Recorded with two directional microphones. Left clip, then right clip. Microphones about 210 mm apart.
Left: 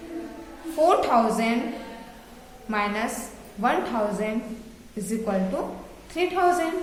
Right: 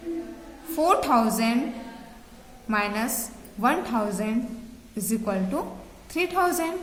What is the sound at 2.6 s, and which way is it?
A woman's voice, 35° right (ahead or behind).